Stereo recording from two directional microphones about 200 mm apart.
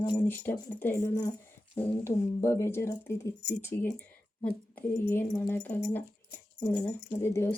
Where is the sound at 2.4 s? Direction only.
15° left (ahead or behind).